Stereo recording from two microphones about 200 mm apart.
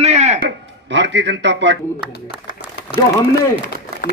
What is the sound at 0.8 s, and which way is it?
Speech, 60° right (ahead or behind).